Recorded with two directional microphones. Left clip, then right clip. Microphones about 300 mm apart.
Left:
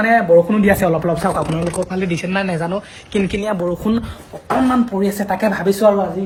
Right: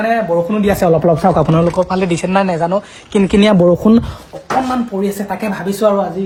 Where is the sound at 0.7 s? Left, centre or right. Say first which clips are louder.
Right 4 dB; centre.